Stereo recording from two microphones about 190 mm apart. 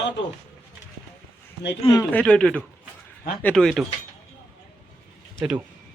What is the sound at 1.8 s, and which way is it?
Speech, 20° left (ahead or behind).